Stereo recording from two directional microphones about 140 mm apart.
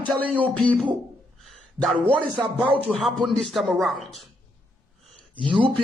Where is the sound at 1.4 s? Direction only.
Centre (ahead or behind).